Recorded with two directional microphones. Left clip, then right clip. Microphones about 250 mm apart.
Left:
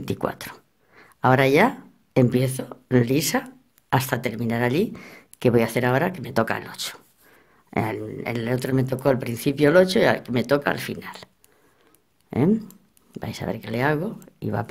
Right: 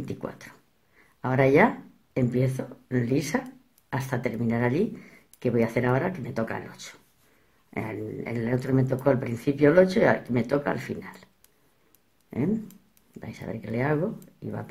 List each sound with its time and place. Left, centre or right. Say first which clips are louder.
0.0 s a sound: left 9 dB; left
2.1 s speech: left 6 dB; left
12.3 s speech: left 7 dB; left